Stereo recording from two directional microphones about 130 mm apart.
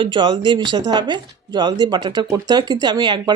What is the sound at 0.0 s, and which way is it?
Speech, 40° right (ahead or behind).